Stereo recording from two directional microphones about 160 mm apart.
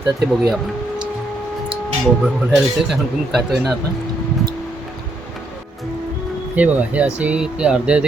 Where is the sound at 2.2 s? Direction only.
5° right (ahead or behind).